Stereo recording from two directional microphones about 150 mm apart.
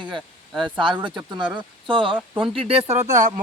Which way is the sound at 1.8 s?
35° right (ahead or behind).